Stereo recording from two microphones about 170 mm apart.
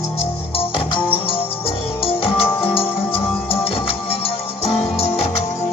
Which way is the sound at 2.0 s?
35° left (ahead or behind).